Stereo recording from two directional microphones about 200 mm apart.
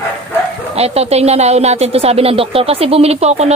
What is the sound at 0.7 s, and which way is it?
A woman's voice, 30° right (ahead or behind).